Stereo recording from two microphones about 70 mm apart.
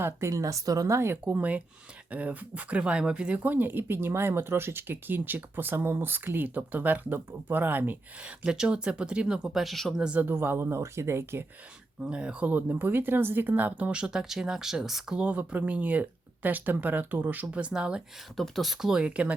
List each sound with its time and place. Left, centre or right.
0.0 s speech: right
0.9 s speech: right
8.4 s speech: centre
10.0 s speech: centre
10.2 s speech: right
12.0 s speech: centre
15.2 s speech: centre
18.3 s speech: centre